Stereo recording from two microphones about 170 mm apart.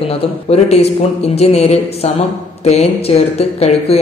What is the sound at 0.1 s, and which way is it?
A man's voice, 35° left (ahead or behind).